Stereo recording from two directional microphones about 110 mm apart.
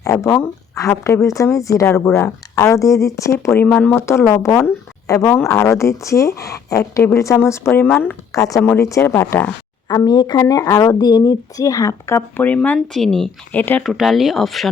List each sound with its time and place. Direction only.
0.0 s speech: 30° left (ahead or behind)
9.9 s speech: 35° left (ahead or behind)
10.3 s speech: 30° left (ahead or behind)
12.5 s speech: 15° left (ahead or behind)
13.6 s speech: 15° left (ahead or behind)
13.8 s speech: centre (ahead or behind)